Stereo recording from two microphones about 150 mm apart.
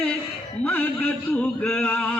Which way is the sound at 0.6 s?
10° left (ahead or behind).